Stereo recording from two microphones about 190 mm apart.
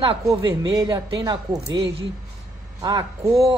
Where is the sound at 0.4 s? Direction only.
20° right (ahead or behind).